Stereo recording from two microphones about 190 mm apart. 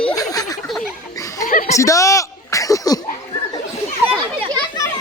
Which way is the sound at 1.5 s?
45° left (ahead or behind).